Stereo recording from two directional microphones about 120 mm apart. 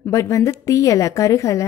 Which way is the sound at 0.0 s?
25° left (ahead or behind).